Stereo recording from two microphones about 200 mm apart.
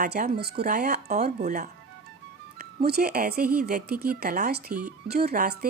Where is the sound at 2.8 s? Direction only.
50° right (ahead or behind).